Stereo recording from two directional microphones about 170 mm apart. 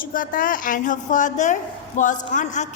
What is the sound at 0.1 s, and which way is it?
A woman's voice, 55° left (ahead or behind).